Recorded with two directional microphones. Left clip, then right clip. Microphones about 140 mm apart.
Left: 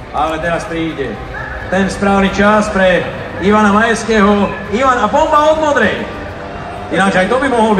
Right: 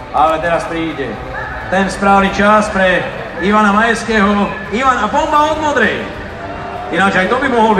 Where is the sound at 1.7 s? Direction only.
Centre (ahead or behind).